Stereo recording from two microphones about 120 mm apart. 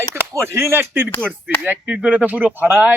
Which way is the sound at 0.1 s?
20° right (ahead or behind).